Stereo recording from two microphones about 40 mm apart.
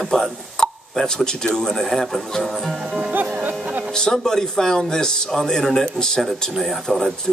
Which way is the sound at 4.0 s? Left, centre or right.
Centre.